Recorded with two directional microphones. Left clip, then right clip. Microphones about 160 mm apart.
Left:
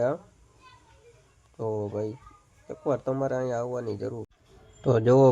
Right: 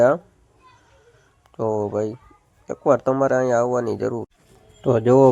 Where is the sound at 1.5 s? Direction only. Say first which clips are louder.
Right 8 dB; 20° right (ahead or behind).